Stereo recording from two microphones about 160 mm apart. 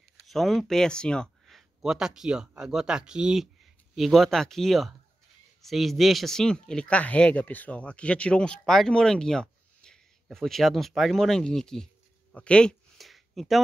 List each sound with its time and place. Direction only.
0.2 s speech: centre (ahead or behind)